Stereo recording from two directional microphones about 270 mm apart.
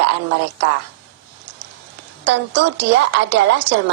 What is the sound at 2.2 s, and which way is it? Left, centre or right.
A woman's voice, right.